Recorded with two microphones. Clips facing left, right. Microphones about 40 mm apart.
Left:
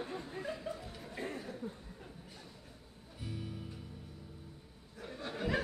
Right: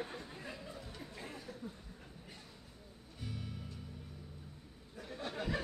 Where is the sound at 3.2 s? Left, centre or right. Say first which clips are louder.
Left 2 dB; centre.